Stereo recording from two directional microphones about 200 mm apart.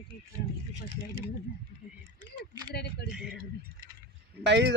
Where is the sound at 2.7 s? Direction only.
55° left (ahead or behind).